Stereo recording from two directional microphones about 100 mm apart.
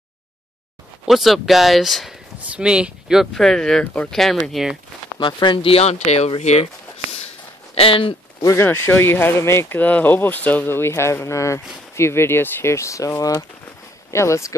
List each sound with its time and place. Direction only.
1.0 s speech: centre (ahead or behind)
4.2 s speech: centre (ahead or behind)
5.2 s speech: 55° left (ahead or behind)
8.4 s speech: 30° left (ahead or behind)
8.6 s speech: 20° left (ahead or behind)